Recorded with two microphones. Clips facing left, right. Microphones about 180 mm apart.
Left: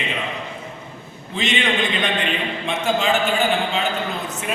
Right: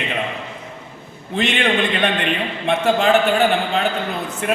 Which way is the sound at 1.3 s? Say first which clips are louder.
Right 3 dB; 60° right (ahead or behind).